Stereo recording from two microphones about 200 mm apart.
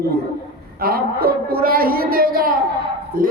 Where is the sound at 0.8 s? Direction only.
50° right (ahead or behind).